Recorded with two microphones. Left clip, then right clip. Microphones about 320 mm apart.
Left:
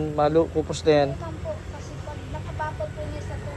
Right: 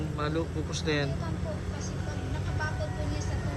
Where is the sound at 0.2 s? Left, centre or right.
Centre.